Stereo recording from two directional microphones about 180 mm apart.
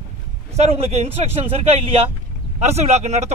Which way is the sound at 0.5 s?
35° right (ahead or behind).